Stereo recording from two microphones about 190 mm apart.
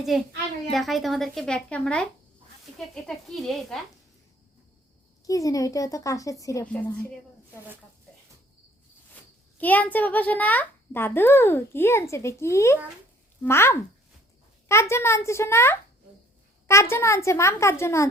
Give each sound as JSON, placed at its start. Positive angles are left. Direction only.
{"t": 0.1, "sound": "speech", "side_deg": 0}
{"t": 5.2, "sound": "a child's voice", "side_deg": 20}
{"t": 9.6, "sound": "a child's voice", "side_deg": 10}
{"t": 16.9, "sound": "a child's voice", "side_deg": 15}